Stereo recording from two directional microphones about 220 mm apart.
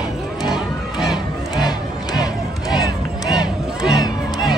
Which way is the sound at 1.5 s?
20° left (ahead or behind).